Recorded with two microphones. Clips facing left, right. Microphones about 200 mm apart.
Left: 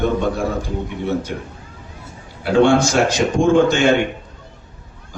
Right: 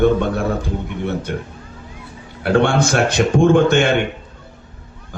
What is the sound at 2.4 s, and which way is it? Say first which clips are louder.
Speech: left 2 dB; 55° right (ahead or behind).